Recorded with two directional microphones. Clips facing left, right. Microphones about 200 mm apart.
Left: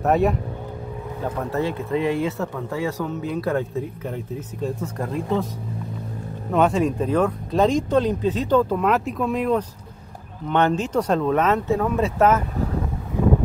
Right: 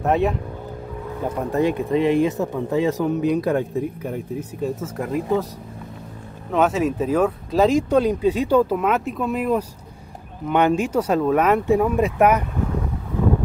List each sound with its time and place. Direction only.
0.0 s speech: centre (ahead or behind)
1.2 s speech: 15° right (ahead or behind)
6.5 s speech: centre (ahead or behind)